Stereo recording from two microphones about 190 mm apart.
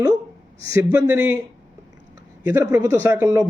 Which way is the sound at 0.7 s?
15° right (ahead or behind).